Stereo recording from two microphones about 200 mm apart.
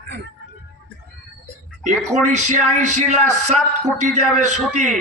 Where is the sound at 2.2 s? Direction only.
35° right (ahead or behind).